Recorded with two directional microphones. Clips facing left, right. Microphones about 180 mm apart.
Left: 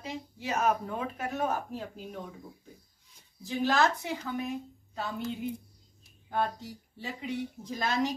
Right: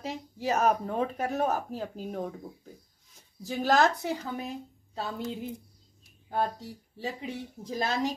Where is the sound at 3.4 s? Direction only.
40° right (ahead or behind).